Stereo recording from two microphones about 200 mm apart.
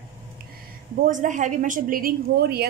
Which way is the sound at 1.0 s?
40° right (ahead or behind).